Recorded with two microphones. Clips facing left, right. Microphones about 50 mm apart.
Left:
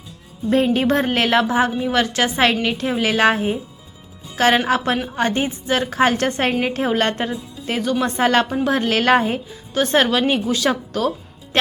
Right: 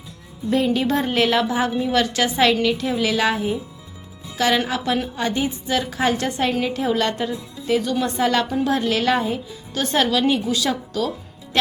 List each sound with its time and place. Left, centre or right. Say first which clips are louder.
0.5 s a woman's voice: left 3 dB; left